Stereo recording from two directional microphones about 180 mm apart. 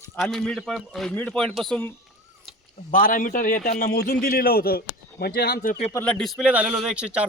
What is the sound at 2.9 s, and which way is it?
A man's voice, 50° left (ahead or behind).